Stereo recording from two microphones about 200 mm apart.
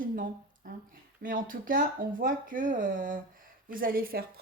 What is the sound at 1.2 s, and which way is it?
A woman's voice, 45° right (ahead or behind).